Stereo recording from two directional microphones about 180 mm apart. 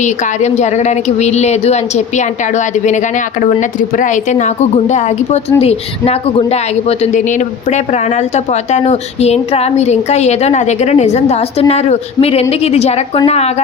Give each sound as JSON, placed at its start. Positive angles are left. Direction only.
{"t": 0.0, "sound": "a woman's voice", "side_deg": 40}